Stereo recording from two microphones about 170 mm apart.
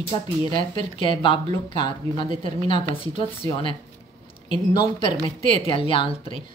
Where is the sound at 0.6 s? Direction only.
30° left (ahead or behind).